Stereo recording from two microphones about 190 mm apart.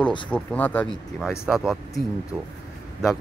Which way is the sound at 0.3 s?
10° left (ahead or behind).